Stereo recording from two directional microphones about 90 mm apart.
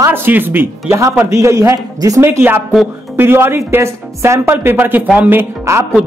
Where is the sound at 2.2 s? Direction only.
25° right (ahead or behind).